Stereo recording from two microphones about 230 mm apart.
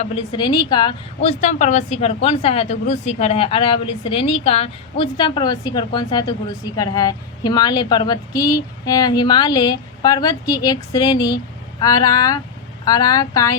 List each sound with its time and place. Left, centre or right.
0.0 s a woman's voice: left